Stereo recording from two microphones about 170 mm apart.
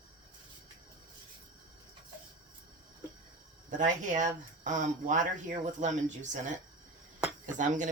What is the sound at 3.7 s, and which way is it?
Speech, 45° right (ahead or behind).